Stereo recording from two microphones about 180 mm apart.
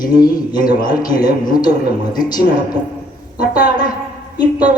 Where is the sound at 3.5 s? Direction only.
20° left (ahead or behind).